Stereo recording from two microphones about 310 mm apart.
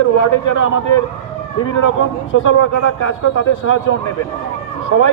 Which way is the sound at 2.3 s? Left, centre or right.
Left.